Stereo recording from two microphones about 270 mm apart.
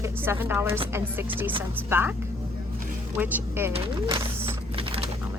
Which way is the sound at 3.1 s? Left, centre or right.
Centre.